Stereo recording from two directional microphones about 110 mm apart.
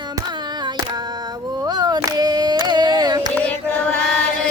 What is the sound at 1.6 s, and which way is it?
Carnatic music, 35° right (ahead or behind).